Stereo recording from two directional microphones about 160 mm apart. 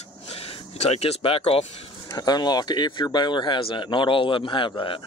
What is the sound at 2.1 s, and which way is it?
Speech, 25° left (ahead or behind).